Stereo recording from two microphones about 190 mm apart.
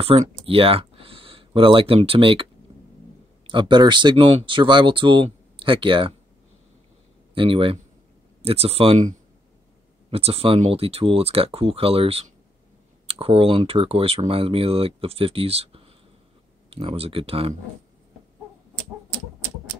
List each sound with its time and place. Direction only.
0.0 s speech: 35° right (ahead or behind)
2.7 s a sound: 30° right (ahead or behind)
3.4 s speech: 25° right (ahead or behind)
7.3 s speech: 30° right (ahead or behind)
10.1 s speech: 30° right (ahead or behind)